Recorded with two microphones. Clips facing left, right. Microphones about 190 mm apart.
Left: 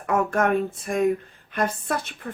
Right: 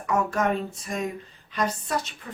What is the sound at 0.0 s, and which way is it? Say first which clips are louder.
A woman's voice: left 3 dB; 55° left (ahead or behind).